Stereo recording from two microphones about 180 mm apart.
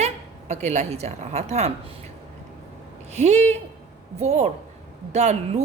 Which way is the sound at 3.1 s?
40° right (ahead or behind).